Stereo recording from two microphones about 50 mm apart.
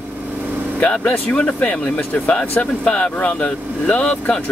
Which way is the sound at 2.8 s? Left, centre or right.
Left.